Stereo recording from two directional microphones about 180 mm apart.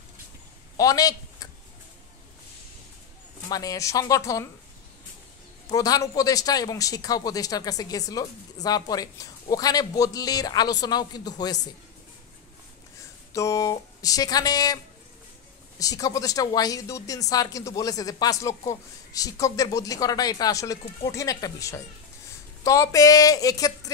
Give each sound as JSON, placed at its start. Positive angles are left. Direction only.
{"t": 0.7, "sound": "a sound", "side_deg": 20}
{"t": 3.4, "sound": "speech", "side_deg": 20}
{"t": 5.7, "sound": "speech", "side_deg": 20}
{"t": 13.3, "sound": "speech", "side_deg": 15}
{"t": 15.8, "sound": "speech", "side_deg": 20}